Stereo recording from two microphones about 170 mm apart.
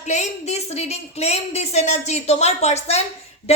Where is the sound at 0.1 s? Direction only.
40° left (ahead or behind).